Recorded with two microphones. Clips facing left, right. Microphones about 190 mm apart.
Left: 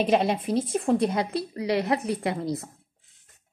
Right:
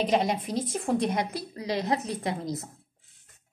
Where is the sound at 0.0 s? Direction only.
15° right (ahead or behind).